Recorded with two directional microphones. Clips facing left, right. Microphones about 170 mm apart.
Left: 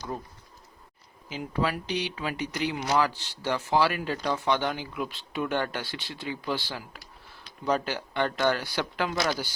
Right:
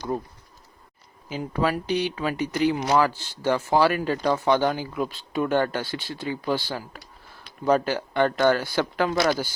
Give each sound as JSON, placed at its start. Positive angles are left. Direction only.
{"t": 1.3, "sound": "speech", "side_deg": -40}